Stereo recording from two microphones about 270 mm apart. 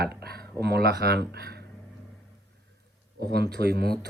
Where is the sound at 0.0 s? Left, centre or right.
Right.